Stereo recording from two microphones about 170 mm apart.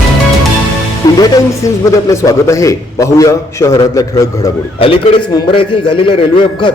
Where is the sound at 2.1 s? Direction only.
15° left (ahead or behind).